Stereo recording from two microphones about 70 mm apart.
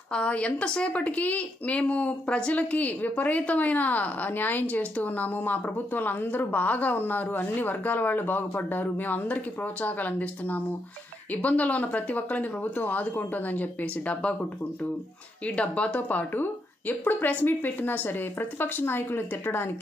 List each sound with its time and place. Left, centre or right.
0.1 s speech: centre; by 19.7 s left